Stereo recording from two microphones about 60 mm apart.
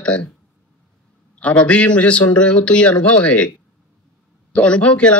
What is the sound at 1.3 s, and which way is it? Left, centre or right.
A man's voice, left.